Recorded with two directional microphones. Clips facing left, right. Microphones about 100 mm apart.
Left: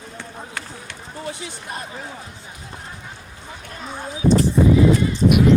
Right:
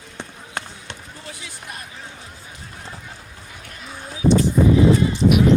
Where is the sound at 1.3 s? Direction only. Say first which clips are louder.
Left 4 dB; 30° left (ahead or behind).